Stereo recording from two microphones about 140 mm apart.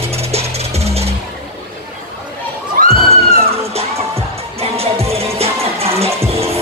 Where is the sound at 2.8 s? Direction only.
90° right.